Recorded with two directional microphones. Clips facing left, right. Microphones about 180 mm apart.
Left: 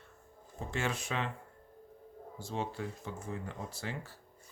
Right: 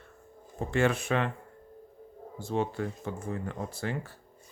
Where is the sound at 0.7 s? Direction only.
60° right (ahead or behind).